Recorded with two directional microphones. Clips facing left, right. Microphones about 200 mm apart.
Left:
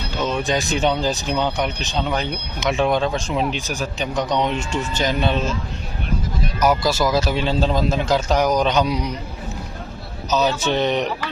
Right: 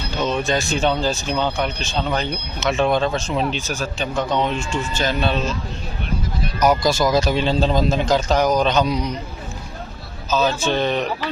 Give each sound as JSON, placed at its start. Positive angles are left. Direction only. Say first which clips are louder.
{"t": 0.2, "sound": "speech", "louder": "right 1 dB", "side_deg": 10}
{"t": 6.6, "sound": "speech", "louder": "right 1 dB", "side_deg": 5}
{"t": 10.2, "sound": "speech", "louder": "even", "side_deg": 20}